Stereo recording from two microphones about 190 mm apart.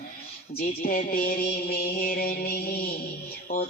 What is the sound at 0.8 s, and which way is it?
Mantra, 45° left (ahead or behind).